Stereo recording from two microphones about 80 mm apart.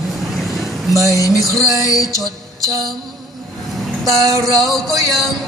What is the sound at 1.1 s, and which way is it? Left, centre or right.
Music, left.